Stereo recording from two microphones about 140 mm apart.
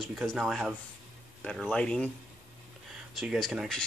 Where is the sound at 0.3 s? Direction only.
Centre (ahead or behind).